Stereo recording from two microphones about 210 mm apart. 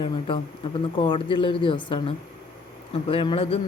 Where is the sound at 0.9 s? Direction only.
25° left (ahead or behind).